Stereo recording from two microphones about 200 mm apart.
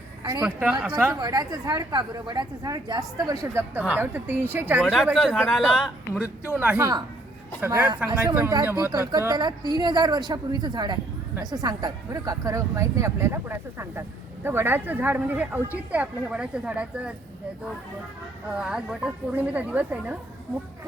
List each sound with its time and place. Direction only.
0.4 s a woman's voice: 5° right (ahead or behind)
1.2 s a woman's voice: 20° right (ahead or behind)
5.0 s speech: 5° left (ahead or behind)
7.6 s a woman's voice: 15° right (ahead or behind)
18.5 s a woman's voice: 5° right (ahead or behind)